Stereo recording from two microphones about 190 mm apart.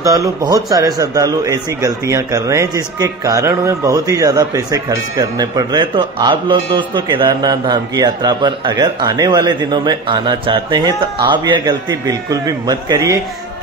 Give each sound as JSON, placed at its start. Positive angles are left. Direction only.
{"t": 0.0, "sound": "speech", "side_deg": -20}